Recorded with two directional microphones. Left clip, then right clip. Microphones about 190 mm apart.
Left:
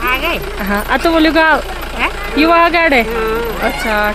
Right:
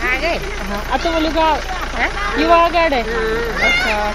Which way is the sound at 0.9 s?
50° left (ahead or behind).